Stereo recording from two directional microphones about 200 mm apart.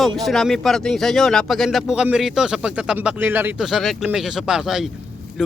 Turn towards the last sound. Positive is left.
turn(degrees=0)  # may be behind; listen again after turning